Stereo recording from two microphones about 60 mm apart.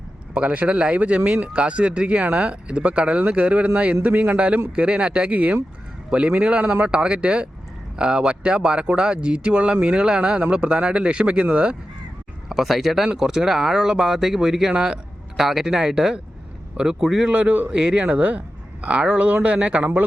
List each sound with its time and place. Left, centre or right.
0.3 s speech: right
12.5 s speech: centre
17.3 s speech: right